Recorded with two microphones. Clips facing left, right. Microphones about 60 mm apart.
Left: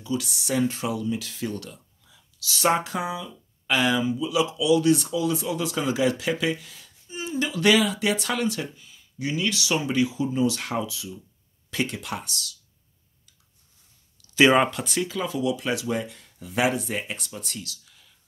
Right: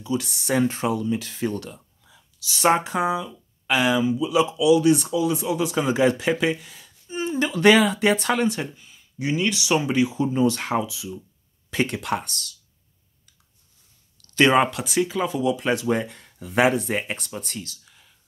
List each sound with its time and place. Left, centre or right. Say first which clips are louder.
0.2 s speech: right 3 dB; right
3.6 s speech: right 2 dB; centre
7.1 s speech: right 4 dB; right
10.1 s speech: right 3 dB; right
11.8 s speech: right 5 dB; right
14.2 s a sound: even; centre
14.5 s speech: right 1 dB; centre
15.0 s speech: right 5 dB; centre
15.3 s speech: right 2 dB; right